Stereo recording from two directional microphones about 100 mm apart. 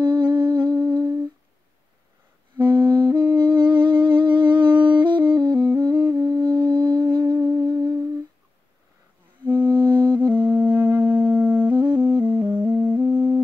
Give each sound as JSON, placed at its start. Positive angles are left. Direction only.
{"t": 0.0, "sound": "humming", "side_deg": -50}
{"t": 2.8, "sound": "music", "side_deg": -50}
{"t": 7.3, "sound": "music", "side_deg": -25}
{"t": 7.6, "sound": "humming", "side_deg": -40}
{"t": 9.5, "sound": "music", "side_deg": -20}
{"t": 9.8, "sound": "music", "side_deg": -50}
{"t": 10.1, "sound": "music", "side_deg": -20}